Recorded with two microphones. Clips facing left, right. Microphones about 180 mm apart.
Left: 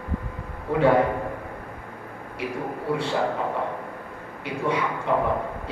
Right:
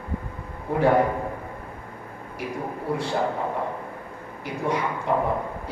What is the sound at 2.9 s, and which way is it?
Speech, 65° left (ahead or behind).